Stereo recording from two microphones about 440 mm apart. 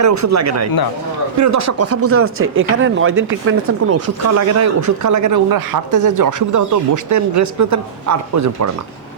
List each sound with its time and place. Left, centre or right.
0.0 s speech: right